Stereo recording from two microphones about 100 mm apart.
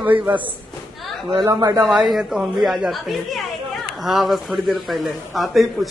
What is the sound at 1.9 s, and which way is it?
A woman's voice, 5° right (ahead or behind).